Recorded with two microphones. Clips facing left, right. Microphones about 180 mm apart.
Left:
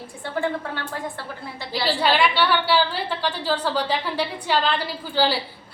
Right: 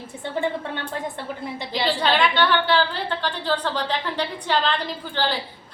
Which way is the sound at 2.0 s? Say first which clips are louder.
Left 1 dB; 10° left (ahead or behind).